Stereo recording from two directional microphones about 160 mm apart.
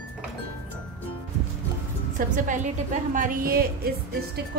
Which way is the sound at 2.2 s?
55° right (ahead or behind).